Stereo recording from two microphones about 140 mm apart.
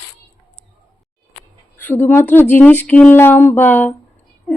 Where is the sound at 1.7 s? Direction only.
15° left (ahead or behind).